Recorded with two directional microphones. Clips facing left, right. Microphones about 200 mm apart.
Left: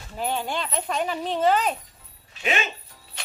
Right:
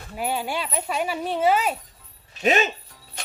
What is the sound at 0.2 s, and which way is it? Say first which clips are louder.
Speech: right 1 dB; 10° right (ahead or behind).